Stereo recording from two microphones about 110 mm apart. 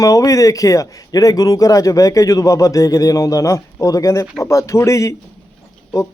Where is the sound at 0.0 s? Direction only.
30° left (ahead or behind).